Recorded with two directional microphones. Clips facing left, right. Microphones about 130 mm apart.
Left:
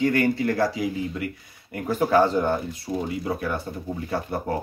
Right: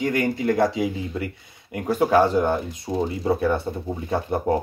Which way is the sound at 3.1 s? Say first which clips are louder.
Right 6 dB; 30° right (ahead or behind).